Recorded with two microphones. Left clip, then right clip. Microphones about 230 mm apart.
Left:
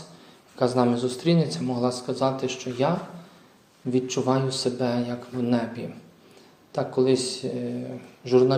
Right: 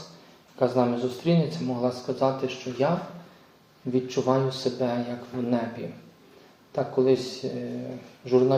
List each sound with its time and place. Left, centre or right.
0.6 s speech: left
3.9 s speech: left